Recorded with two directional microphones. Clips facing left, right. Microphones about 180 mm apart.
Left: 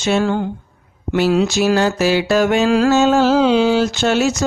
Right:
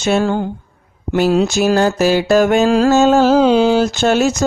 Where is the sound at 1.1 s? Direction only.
45° right (ahead or behind).